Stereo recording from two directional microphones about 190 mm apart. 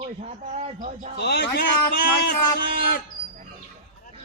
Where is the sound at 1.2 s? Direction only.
60° left (ahead or behind).